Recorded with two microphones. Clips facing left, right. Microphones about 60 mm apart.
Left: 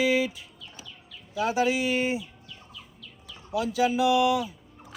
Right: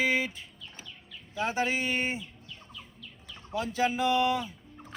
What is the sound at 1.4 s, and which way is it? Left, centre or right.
Speech, right.